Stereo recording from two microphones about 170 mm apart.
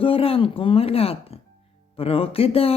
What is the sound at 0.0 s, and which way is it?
Speech, 35° left (ahead or behind).